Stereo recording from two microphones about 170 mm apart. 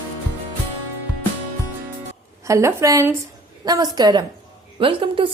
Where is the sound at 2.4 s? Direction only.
15° right (ahead or behind).